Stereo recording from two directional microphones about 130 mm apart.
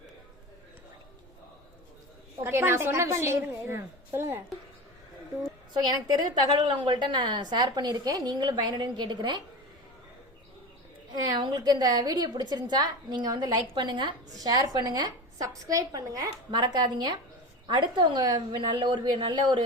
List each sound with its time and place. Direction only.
2.4 s a woman's voice: 20° right (ahead or behind)
6.6 s a woman's voice: 35° right (ahead or behind)
11.1 s a woman's voice: 30° right (ahead or behind)